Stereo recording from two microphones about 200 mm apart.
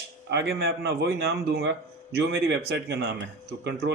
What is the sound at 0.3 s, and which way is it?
A man's voice, 55° right (ahead or behind).